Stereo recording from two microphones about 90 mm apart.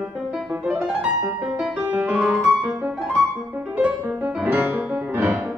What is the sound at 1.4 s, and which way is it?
Music, 15° right (ahead or behind).